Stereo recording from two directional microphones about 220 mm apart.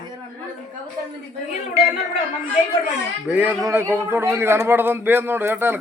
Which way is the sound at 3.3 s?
10° right (ahead or behind).